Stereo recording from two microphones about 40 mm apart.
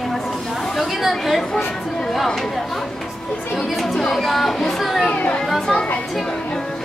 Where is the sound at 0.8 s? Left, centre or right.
Centre.